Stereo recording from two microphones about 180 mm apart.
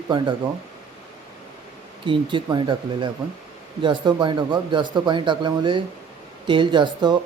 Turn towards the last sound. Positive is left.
turn(degrees=-25)  # may be behind; listen again after turning